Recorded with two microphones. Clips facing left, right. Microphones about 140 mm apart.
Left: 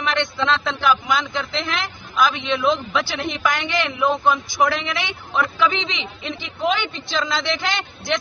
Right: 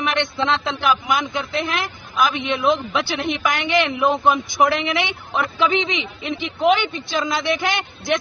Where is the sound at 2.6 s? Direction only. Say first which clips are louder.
Right 1 dB; 20° right (ahead or behind).